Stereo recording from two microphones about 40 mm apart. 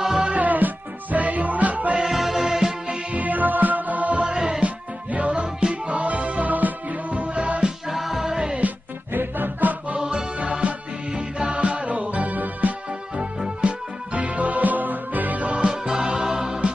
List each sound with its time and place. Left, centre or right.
0.0 s music: centre
0.3 s music: right
2.0 s music: centre
3.1 s music: right
4.2 s music: centre
4.6 s music: right
7.9 s music: centre
9.1 s music: right
9.9 s music: centre
11.5 s music: right
13.2 s music: right
15.7 s music: right